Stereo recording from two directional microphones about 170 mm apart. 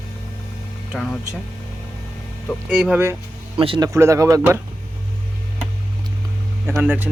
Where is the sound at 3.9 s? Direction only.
15° right (ahead or behind).